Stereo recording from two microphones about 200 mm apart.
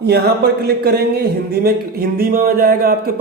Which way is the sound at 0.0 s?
55° right (ahead or behind).